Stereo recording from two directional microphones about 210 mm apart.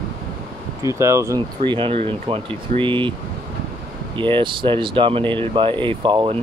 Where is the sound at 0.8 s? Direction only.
15° right (ahead or behind).